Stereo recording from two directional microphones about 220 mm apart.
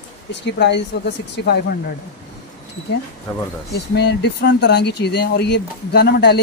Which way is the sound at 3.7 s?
50° left (ahead or behind).